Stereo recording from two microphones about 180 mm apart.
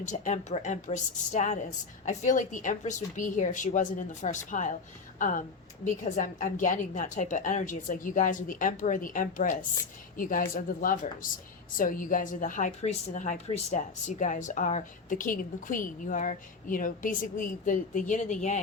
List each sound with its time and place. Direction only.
0.0 s a woman's voice: 40° left (ahead or behind)